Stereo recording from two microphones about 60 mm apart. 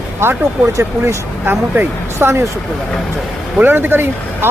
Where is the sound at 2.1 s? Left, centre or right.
Right.